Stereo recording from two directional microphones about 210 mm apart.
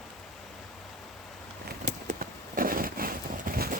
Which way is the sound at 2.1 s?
40° right (ahead or behind).